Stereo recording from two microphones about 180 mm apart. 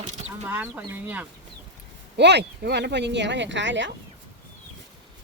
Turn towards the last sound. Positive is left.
turn(degrees=-90)